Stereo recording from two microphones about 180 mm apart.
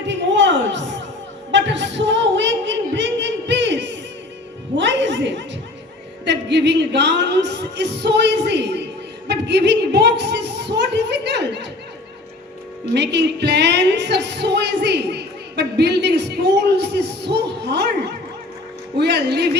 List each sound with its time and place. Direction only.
0.1 s a sound: 90° right
4.8 s music: 85° right
6.2 s a woman's voice: 70° right (ahead or behind)
12.9 s music: 70° right (ahead or behind)
18.9 s speech: 65° right (ahead or behind)